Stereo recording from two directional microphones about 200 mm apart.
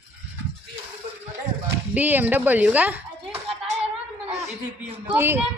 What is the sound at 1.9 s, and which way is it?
Speech, 10° right (ahead or behind).